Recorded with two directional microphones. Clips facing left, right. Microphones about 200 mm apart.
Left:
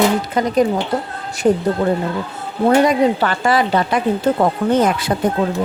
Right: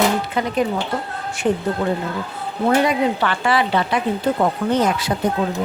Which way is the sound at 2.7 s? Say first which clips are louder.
Left 4 dB; 40° left (ahead or behind).